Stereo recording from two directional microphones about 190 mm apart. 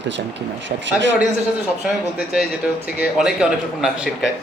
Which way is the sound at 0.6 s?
70° right (ahead or behind).